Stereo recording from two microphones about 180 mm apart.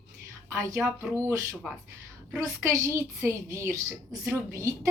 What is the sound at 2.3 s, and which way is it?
A woman's voice, 15° right (ahead or behind).